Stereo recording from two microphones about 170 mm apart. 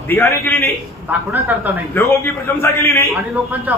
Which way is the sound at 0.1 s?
10° left (ahead or behind).